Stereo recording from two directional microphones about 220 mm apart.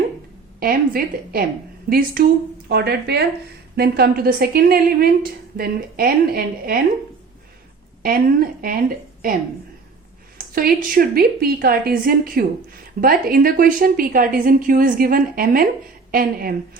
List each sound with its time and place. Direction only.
0.6 s a woman's voice: 40° right (ahead or behind)
8.0 s a woman's voice: 40° right (ahead or behind)
10.3 s a woman's voice: 40° right (ahead or behind)